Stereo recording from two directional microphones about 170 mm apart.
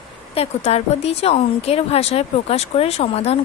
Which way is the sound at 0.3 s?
40° left (ahead or behind).